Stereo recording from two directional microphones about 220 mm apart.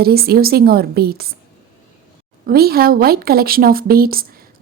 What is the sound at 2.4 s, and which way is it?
Speech, 45° right (ahead or behind).